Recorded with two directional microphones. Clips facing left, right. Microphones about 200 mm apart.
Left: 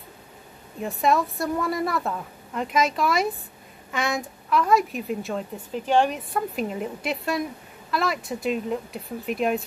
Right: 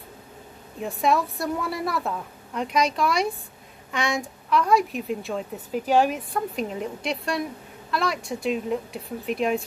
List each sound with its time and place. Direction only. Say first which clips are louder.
0.7 s a woman's voice: left 1 dB; centre (ahead or behind)